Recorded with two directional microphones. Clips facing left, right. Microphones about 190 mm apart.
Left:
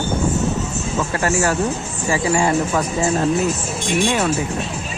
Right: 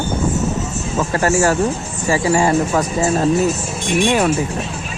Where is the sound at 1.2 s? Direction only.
40° right (ahead or behind).